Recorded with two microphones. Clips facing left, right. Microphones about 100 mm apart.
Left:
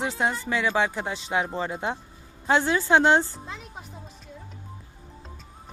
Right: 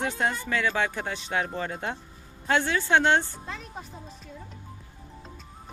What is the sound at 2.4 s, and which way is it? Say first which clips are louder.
Speech: left 3 dB; 25° left (ahead or behind).